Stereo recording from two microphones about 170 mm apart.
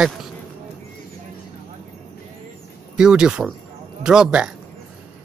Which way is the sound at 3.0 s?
5° right (ahead or behind).